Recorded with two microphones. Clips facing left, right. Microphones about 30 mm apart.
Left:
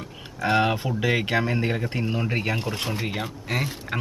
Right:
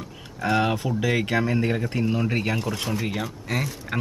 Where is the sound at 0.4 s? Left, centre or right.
Centre.